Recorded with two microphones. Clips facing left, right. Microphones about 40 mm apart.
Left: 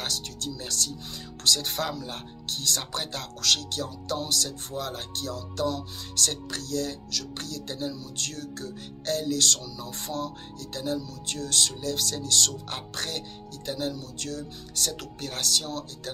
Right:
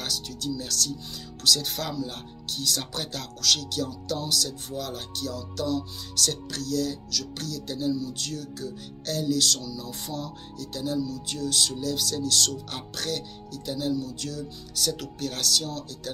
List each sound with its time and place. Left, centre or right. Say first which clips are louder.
0.0 s speech: right 1 dB; left
3.2 s speech: right 1 dB; left
13.7 s speech: right 3 dB; left
15.2 s speech: right 1 dB; left